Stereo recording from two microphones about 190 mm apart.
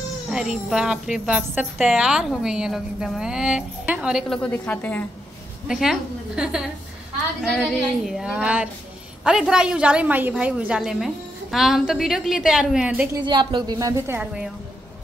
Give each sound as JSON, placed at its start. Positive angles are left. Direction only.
{"t": 0.3, "sound": "a woman's voice", "side_deg": 0}
{"t": 5.7, "sound": "a woman's voice", "side_deg": 0}
{"t": 13.2, "sound": "a woman's voice", "side_deg": -25}